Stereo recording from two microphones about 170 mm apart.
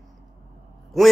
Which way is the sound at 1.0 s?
Centre (ahead or behind).